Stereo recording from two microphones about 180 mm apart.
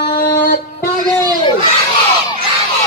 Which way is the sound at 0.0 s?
55° left (ahead or behind).